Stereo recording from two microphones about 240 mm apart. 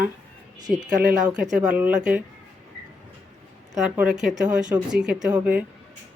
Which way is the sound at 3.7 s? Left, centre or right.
Centre.